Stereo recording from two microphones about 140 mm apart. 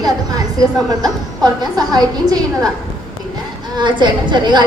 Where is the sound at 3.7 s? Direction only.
35° right (ahead or behind).